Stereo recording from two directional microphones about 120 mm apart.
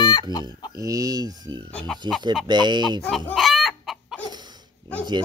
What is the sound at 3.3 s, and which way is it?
Chicken, centre (ahead or behind).